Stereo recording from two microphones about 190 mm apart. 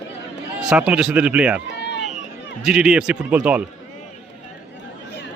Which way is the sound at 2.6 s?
5° right (ahead or behind).